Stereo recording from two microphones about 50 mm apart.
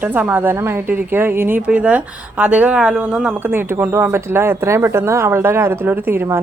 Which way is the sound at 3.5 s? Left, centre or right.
Right.